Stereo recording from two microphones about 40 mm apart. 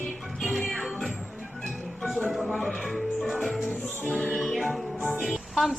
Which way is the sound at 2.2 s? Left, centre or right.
Centre.